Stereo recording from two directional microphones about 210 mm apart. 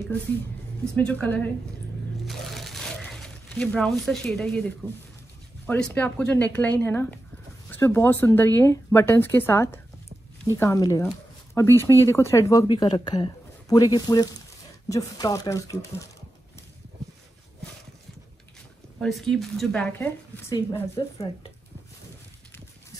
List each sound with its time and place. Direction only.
0.9 s speech: 5° left (ahead or behind)
2.2 s a sound: centre (ahead or behind)
5.7 s speech: 10° left (ahead or behind)
18.9 s speech: centre (ahead or behind)
20.0 s speech: 15° left (ahead or behind)